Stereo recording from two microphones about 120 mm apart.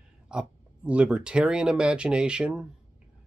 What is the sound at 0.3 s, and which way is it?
Speech, 10° right (ahead or behind).